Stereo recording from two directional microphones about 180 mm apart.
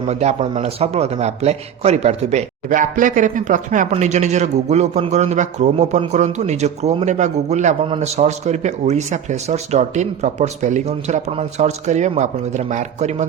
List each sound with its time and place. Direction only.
0.1 s a man's voice: 40° right (ahead or behind)